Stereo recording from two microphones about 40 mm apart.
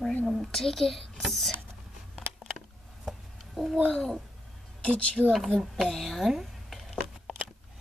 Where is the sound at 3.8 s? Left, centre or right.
Centre.